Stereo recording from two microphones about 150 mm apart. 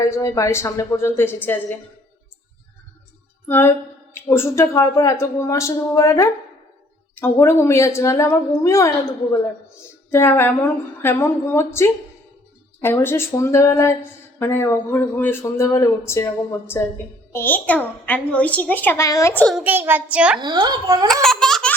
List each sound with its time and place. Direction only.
0.0 s speech: 20° left (ahead or behind)
3.5 s a woman's voice: 15° left (ahead or behind)
10.1 s a woman's voice: 15° left (ahead or behind)
19.3 s speech: 10° left (ahead or behind)
19.5 s a child's voice: 10° right (ahead or behind)
20.4 s a woman's voice: 30° right (ahead or behind)
21.1 s baby laughter: 5° left (ahead or behind)